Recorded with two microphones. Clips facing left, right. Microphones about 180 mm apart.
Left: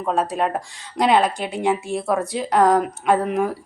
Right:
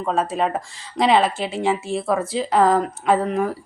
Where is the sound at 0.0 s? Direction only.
Centre (ahead or behind).